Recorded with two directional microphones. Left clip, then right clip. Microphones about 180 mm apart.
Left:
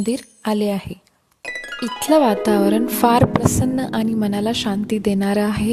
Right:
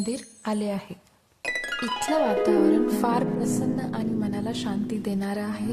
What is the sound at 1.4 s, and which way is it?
Music, centre (ahead or behind).